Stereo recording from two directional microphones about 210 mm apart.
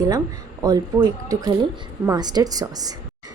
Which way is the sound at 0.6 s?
15° right (ahead or behind).